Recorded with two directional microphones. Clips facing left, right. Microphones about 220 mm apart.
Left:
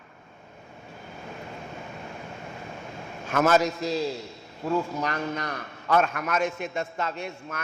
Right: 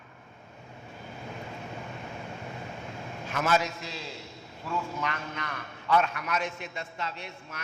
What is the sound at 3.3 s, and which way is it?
A man's voice, 45° left (ahead or behind).